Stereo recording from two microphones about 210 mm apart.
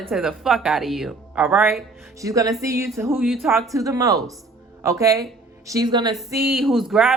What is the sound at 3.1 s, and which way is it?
Speech, centre (ahead or behind).